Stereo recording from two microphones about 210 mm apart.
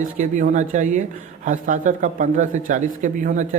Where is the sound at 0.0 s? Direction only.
35° right (ahead or behind).